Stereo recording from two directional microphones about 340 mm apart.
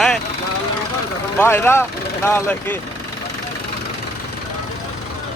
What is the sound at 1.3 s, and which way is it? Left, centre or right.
Speech, centre.